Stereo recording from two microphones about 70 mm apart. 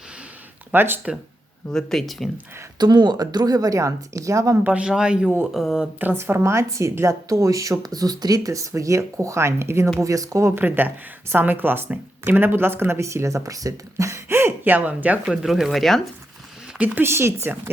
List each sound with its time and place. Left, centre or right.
0.7 s speech: right
1.7 s speech: centre
2.7 s a woman's voice: right
4.6 s speech: centre
6.1 s speech: right
7.9 s speech: right
10.0 s speech: right
10.6 s speech: right
15.4 s speech: centre
16.7 s speech: right
17.0 s speech: right